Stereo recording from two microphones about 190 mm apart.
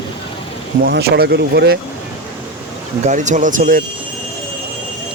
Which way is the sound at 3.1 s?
40° right (ahead or behind).